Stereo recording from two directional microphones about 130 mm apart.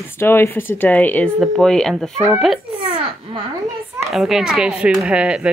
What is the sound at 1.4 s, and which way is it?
Speech, centre (ahead or behind).